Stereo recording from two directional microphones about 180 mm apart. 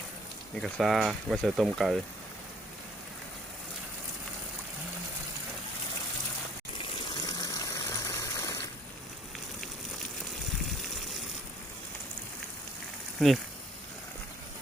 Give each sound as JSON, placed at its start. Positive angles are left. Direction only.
{"t": 0.6, "sound": "speech", "side_deg": 0}
{"t": 6.7, "sound": "water", "side_deg": 20}
{"t": 13.1, "sound": "speech", "side_deg": 0}